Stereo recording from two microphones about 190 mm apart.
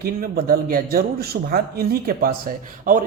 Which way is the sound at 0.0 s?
50° right (ahead or behind).